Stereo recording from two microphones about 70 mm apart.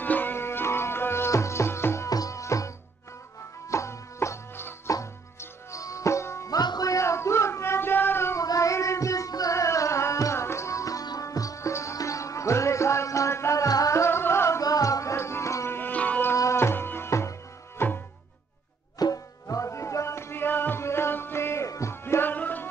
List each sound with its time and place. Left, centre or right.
0.0 s music: left
2.0 s music: left
6.5 s music: left
6.9 s a sound: left
8.4 s music: left
14.6 s music: left
15.9 s music: left
16.5 s music: left
18.9 s music: left
19.4 s music: left
21.6 s music: left
21.9 s music: left